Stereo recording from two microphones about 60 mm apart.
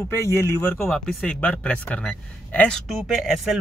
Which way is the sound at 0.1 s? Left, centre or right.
Left.